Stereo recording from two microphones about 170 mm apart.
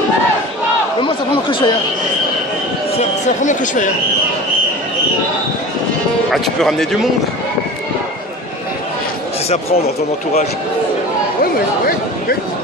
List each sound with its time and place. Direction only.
1.0 s speech: 30° left (ahead or behind)
3.0 s speech: 45° left (ahead or behind)
6.3 s speech: centre (ahead or behind)
11.5 s speech: 60° left (ahead or behind)